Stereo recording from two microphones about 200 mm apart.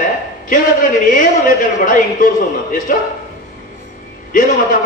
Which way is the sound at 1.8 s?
40° left (ahead or behind).